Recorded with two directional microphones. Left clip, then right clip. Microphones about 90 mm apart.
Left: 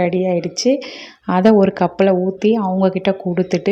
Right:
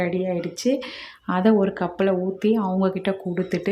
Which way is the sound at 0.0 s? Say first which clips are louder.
Left 7 dB; 55° left (ahead or behind).